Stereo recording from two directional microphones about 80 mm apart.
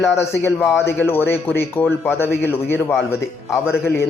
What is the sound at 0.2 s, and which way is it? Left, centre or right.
A man's voice, left.